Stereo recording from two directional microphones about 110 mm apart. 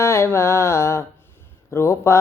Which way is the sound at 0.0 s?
25° left (ahead or behind).